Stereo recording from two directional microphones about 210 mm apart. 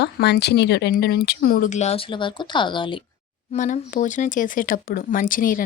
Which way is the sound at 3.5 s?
35° left (ahead or behind).